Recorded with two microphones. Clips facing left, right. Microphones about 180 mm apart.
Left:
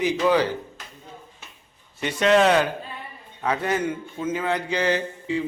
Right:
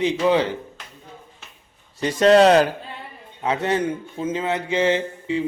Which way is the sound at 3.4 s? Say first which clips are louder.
Right 2 dB; 25° right (ahead or behind).